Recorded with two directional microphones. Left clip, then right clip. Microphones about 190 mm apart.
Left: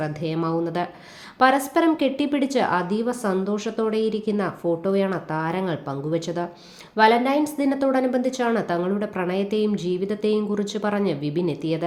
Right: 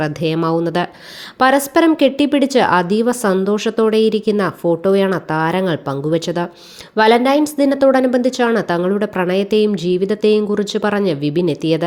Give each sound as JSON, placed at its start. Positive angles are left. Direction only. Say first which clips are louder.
{"t": 0.0, "sound": "a woman's voice", "louder": "right 8 dB", "side_deg": -40}